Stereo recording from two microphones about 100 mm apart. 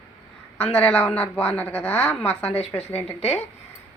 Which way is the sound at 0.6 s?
15° left (ahead or behind).